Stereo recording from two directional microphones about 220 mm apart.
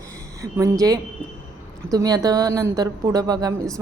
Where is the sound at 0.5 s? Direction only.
15° right (ahead or behind).